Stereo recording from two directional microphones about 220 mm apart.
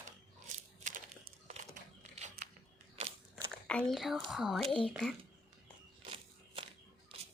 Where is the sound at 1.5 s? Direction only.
30° right (ahead or behind).